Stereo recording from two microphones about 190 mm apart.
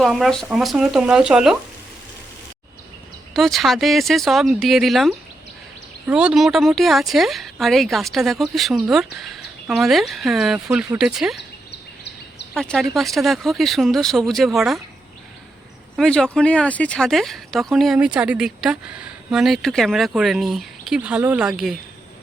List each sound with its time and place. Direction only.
0.0 s speech: centre (ahead or behind)
3.3 s speech: centre (ahead or behind)
11.3 s a sound: 65° left (ahead or behind)
12.5 s speech: centre (ahead or behind)
16.0 s speech: 5° left (ahead or behind)